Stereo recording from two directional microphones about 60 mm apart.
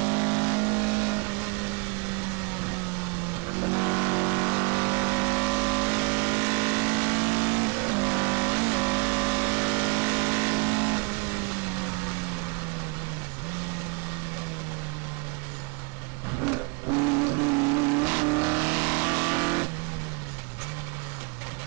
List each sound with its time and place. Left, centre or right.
0.0 s vehicle: right
16.4 s vehicle: right